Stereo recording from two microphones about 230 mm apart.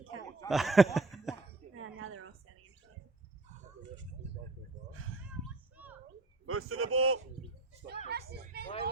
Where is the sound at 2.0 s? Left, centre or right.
Right.